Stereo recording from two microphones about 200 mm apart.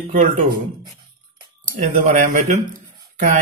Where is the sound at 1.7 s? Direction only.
40° right (ahead or behind).